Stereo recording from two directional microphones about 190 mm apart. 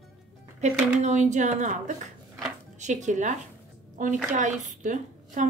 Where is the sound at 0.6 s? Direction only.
35° right (ahead or behind).